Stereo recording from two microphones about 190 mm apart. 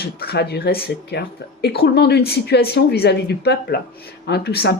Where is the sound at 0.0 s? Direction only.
55° left (ahead or behind).